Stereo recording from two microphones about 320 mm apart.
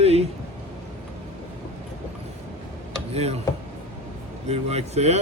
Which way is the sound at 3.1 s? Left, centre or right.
Centre.